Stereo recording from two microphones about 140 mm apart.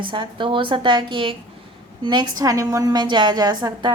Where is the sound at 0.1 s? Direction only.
35° right (ahead or behind).